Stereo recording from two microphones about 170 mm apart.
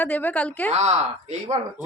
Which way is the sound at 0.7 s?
40° right (ahead or behind).